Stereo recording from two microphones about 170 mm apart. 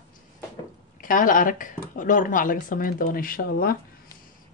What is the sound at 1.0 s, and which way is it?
Speech, 55° left (ahead or behind).